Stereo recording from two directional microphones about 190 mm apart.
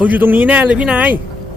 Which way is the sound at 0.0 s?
10° right (ahead or behind).